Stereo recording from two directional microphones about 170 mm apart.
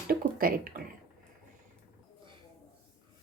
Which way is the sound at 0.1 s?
60° right (ahead or behind).